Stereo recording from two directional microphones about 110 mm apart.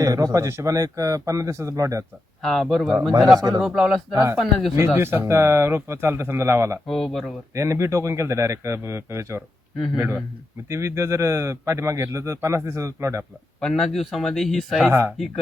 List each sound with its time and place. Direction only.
0.0 s speech: 30° right (ahead or behind)
2.4 s a man's voice: centre (ahead or behind)
3.3 s speech: 35° right (ahead or behind)
3.6 s a man's voice: centre (ahead or behind)
4.1 s speech: 30° right (ahead or behind)
4.4 s a man's voice: centre (ahead or behind)
4.8 s speech: 20° right (ahead or behind)
6.8 s a man's voice: centre (ahead or behind)
7.5 s speech: 25° right (ahead or behind)
10.7 s speech: 25° right (ahead or behind)
13.6 s a man's voice: centre (ahead or behind)